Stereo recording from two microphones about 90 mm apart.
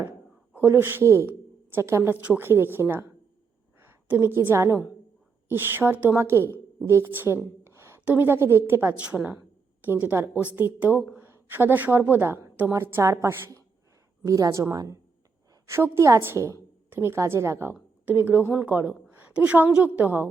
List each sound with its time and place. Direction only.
0.5 s a woman's voice: 25° right (ahead or behind)
7.6 s a sound: 25° right (ahead or behind)
8.0 s a woman's voice: 20° right (ahead or behind)
9.0 s a woman's voice: 15° right (ahead or behind)